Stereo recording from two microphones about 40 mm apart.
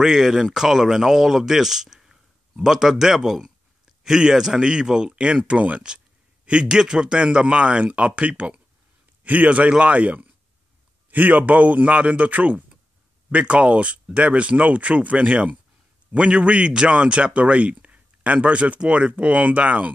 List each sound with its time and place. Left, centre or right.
0.0 s a man's voice: centre; by 19.9 s right